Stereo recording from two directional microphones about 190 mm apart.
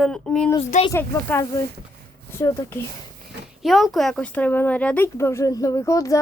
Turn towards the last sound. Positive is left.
turn(degrees=15)  # may be behind; listen again after turning